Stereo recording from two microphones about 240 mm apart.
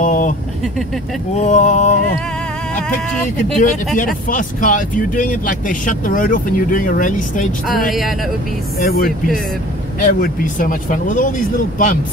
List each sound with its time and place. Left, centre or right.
0.0 s vehicle: left
1.4 s a sound: left
3.6 s speech: left
8.7 s speech: left